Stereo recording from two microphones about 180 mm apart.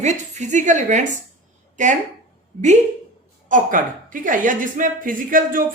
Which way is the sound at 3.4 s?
50° right (ahead or behind).